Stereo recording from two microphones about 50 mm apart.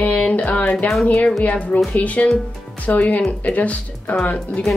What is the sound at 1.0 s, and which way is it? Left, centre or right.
A woman's voice, left.